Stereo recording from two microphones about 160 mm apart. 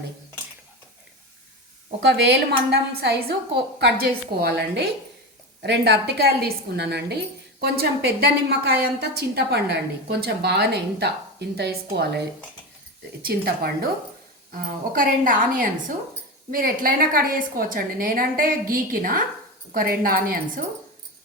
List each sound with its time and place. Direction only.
2.0 s a woman's voice: 90° right
13.2 s a woman's voice: 70° right (ahead or behind)
14.9 s a woman's voice: 60° right (ahead or behind)